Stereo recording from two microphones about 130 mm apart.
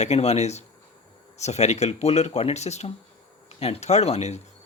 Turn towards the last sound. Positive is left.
turn(degrees=55)  # may be behind; listen again after turning